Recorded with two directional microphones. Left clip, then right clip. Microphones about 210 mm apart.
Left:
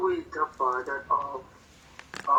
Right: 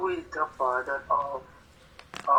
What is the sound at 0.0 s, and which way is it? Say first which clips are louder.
Speech: left 2 dB; 20° right (ahead or behind).